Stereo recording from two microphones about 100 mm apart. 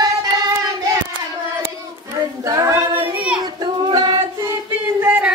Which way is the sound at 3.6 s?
45° right (ahead or behind).